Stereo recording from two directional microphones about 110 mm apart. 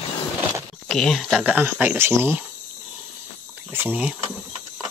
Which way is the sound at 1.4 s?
15° right (ahead or behind).